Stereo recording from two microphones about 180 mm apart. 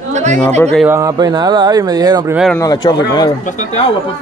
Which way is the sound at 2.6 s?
20° left (ahead or behind).